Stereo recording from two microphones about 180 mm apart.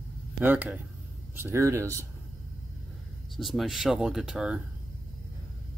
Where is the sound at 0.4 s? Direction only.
10° right (ahead or behind).